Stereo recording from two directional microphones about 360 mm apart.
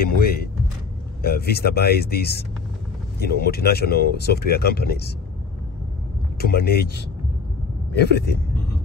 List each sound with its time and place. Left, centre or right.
1.2 s speech: left
6.3 s speech: left